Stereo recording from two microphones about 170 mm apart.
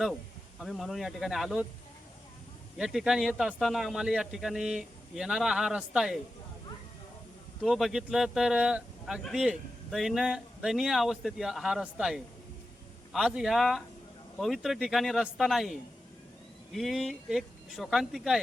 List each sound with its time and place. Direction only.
0.6 s speech: centre (ahead or behind)
2.7 s speech: 5° right (ahead or behind)
7.6 s speech: centre (ahead or behind)